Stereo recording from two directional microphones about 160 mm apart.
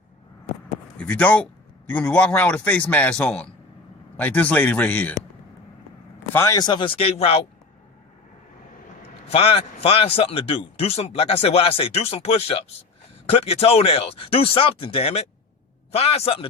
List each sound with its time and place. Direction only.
0.9 s a man's voice: 5° left (ahead or behind)
6.3 s speech: 20° left (ahead or behind); by 7.4 s 40° left (ahead or behind)
9.3 s speech: 35° left (ahead or behind)